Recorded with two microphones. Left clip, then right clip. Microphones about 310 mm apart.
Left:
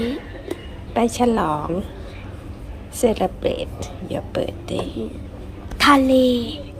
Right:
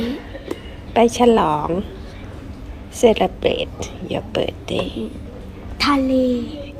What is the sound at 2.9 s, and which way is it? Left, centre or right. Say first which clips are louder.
A woman's voice: right 5 dB; centre.